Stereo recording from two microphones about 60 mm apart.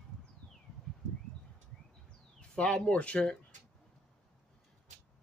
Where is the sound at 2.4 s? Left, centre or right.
Centre.